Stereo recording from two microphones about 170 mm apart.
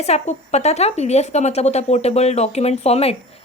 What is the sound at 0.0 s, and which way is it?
A woman's voice, 40° left (ahead or behind).